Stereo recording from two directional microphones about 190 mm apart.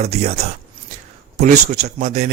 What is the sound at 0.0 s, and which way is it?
Speech, 35° right (ahead or behind).